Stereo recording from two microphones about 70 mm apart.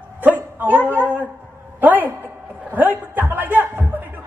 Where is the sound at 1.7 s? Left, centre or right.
Right.